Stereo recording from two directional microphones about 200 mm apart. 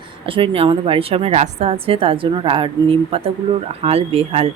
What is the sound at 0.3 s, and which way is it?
A woman's voice, 25° right (ahead or behind).